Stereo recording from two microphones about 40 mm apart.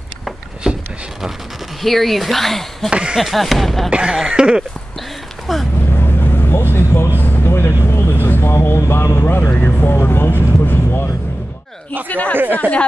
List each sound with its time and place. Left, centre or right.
0.7 s a sound: centre
1.8 s speech: centre
2.9 s a sound: right
3.2 s speech: centre
3.9 s a sound: right
5.5 s speech: centre
5.9 s vehicle: left
9.8 s speech: left
12.1 s speech: left